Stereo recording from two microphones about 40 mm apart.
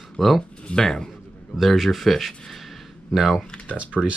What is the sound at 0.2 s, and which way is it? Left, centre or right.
Speech, centre.